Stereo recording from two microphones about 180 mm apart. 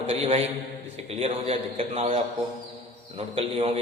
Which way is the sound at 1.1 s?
35° right (ahead or behind).